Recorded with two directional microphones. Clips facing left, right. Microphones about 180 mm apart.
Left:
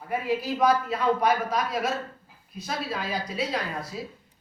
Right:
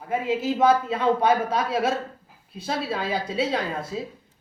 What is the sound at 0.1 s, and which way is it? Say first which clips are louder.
A woman's voice: right 3 dB; 20° right (ahead or behind).